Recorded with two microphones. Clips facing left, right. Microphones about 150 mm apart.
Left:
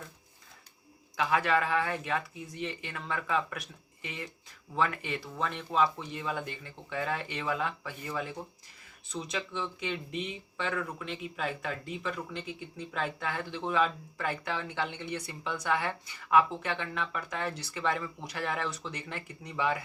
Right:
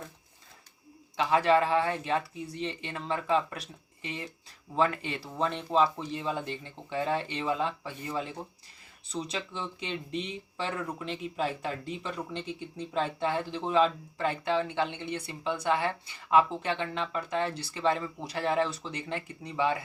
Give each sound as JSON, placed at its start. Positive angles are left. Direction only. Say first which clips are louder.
{"t": 1.1, "sound": "speech", "louder": "right 4 dB", "side_deg": -25}